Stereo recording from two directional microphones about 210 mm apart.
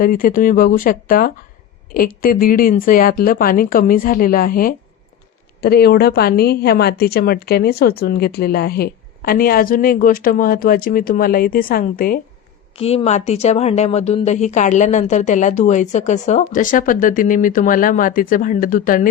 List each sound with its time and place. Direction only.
0.0 s a woman's voice: 40° left (ahead or behind)
12.7 s speech: 30° left (ahead or behind)